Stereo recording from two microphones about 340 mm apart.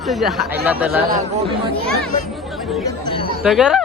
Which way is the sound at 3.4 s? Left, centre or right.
Centre.